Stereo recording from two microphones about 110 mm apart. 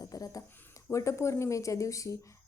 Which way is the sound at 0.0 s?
35° left (ahead or behind).